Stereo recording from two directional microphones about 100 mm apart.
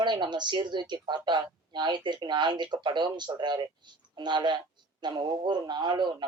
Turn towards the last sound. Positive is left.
turn(degrees=-50)  # may be behind; listen again after turning